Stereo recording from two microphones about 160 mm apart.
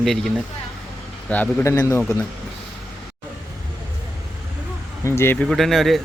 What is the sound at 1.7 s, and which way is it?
Speech, 25° left (ahead or behind).